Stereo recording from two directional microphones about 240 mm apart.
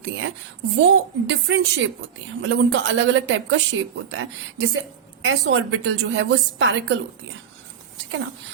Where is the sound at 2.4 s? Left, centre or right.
Right.